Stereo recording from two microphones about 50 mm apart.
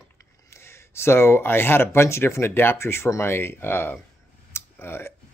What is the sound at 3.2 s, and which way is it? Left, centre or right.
Speech, left.